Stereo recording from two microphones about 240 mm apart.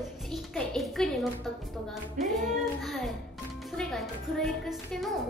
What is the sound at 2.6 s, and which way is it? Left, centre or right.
Child singing, centre.